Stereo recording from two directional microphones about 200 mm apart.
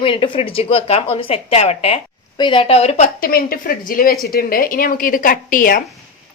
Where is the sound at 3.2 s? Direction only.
45° left (ahead or behind).